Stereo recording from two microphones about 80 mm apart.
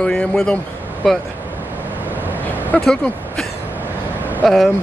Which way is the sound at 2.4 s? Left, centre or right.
Left.